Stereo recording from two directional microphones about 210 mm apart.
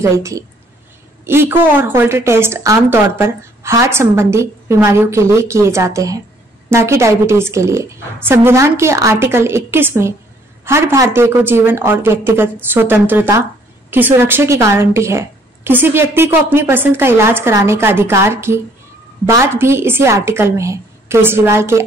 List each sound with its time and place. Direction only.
0.0 s a woman's voice: 15° right (ahead or behind)